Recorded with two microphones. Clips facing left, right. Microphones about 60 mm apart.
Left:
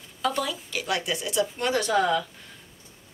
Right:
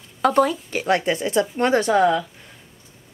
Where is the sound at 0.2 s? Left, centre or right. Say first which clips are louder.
Right 10 dB; right.